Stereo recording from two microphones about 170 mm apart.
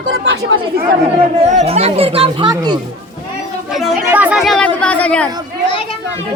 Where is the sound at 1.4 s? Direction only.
40° right (ahead or behind).